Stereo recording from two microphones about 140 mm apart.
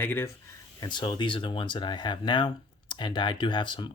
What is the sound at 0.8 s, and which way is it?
Speech, 30° left (ahead or behind).